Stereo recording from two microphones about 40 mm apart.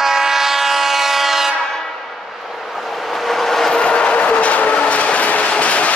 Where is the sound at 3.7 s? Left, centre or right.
Left.